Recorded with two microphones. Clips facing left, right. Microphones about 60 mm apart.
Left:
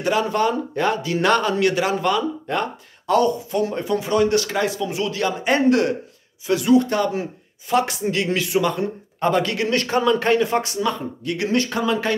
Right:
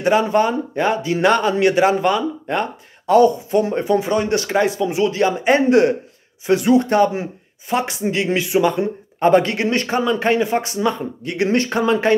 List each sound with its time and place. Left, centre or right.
0.0 s speech: right